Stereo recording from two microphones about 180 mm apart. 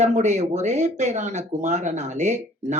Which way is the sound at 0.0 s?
40° right (ahead or behind).